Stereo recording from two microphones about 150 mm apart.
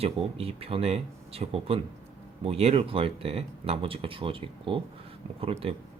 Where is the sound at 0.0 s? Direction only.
40° right (ahead or behind).